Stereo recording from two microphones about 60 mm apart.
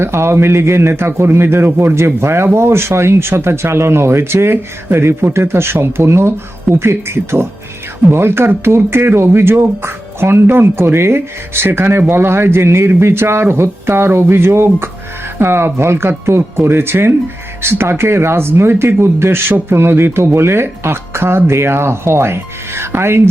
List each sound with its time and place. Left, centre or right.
0.0 s speech: right